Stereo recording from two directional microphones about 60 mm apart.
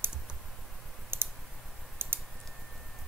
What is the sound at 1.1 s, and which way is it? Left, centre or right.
Clicking, right.